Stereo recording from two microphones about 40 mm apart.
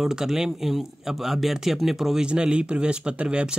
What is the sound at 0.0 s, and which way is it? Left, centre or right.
Speech, centre.